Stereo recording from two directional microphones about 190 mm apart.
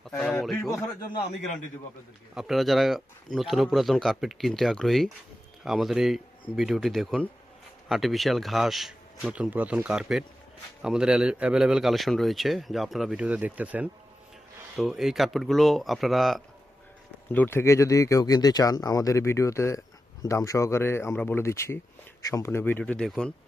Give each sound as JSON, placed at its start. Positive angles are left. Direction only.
{"t": 0.2, "sound": "speech", "side_deg": 5}
{"t": 2.3, "sound": "a man's voice", "side_deg": 0}
{"t": 17.3, "sound": "speech", "side_deg": 10}